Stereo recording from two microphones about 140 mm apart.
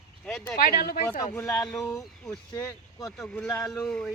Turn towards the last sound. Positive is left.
turn(degrees=5)  # may be behind; listen again after turning